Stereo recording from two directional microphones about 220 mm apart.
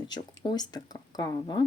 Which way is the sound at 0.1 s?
20° left (ahead or behind).